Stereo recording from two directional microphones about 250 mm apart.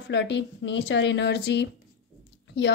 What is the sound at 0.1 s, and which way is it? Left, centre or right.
A woman's voice, left.